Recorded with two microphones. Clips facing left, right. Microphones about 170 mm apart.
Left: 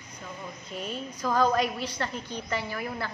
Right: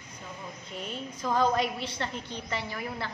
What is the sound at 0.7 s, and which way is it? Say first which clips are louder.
A woman's voice: left 2 dB; 20° right (ahead or behind).